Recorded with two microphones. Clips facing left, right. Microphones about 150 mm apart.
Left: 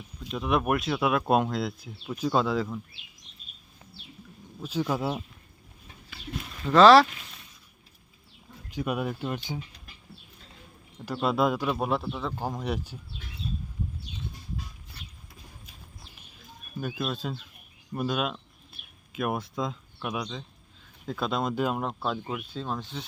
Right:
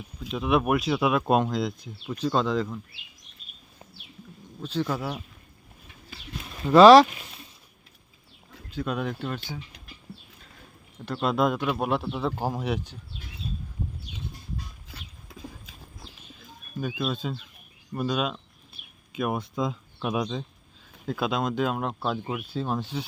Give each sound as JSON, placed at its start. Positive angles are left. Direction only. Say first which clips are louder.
{"t": 0.3, "sound": "speech", "louder": "right 2 dB", "side_deg": 0}
{"t": 4.6, "sound": "speech", "louder": "even", "side_deg": 10}
{"t": 4.9, "sound": "speech", "louder": "left 3 dB", "side_deg": 25}
{"t": 6.7, "sound": "speech", "louder": "right 3 dB", "side_deg": -15}
{"t": 8.7, "sound": "speech", "louder": "even", "side_deg": 10}
{"t": 11.0, "sound": "speech", "louder": "right 1 dB", "side_deg": 5}
{"t": 14.9, "sound": "clip-clop", "louder": "right 5 dB", "side_deg": -90}
{"t": 16.8, "sound": "speech", "louder": "right 2 dB", "side_deg": 0}
{"t": 20.1, "sound": "speech", "louder": "right 7 dB", "side_deg": -25}
{"t": 21.1, "sound": "speech", "louder": "right 2 dB", "side_deg": 0}